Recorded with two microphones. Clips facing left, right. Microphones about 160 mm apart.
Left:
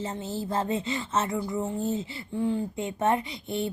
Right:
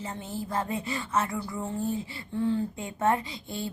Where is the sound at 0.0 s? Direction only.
25° left (ahead or behind).